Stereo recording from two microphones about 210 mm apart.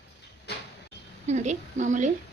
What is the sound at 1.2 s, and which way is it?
Speech, 35° right (ahead or behind).